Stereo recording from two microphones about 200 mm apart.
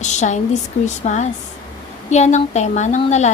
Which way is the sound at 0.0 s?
35° left (ahead or behind).